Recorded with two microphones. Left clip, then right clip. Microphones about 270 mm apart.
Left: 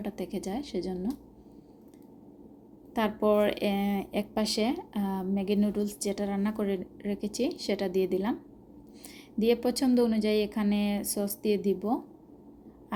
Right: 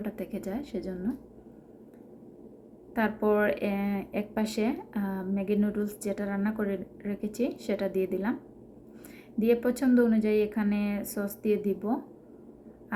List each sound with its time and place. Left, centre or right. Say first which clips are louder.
0.0 s speech: even; left
2.9 s speech: left 1 dB; left
9.4 s speech: even; left